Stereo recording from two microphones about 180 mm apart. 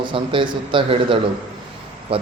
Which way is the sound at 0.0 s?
25° right (ahead or behind).